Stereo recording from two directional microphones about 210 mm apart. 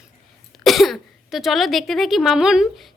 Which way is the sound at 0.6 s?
Centre (ahead or behind).